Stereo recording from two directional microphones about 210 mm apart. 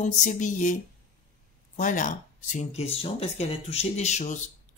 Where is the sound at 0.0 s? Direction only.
35° left (ahead or behind).